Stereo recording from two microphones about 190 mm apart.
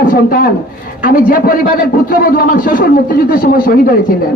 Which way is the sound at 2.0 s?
45° left (ahead or behind).